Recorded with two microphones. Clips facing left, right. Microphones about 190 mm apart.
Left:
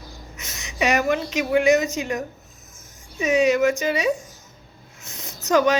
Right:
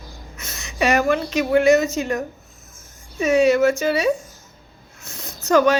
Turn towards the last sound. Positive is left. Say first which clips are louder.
# right 2 dB
turn(degrees=15)  # may be behind; listen again after turning